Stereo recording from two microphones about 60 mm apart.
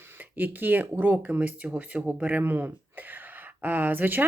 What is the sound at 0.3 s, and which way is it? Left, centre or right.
Speech, right.